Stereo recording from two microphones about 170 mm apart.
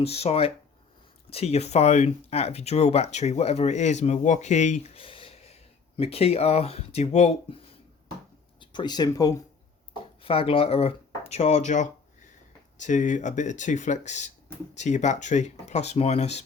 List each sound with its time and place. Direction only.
0.0 s speech: 35° left (ahead or behind)
8.7 s speech: 25° left (ahead or behind)
10.2 s speech: 35° left (ahead or behind)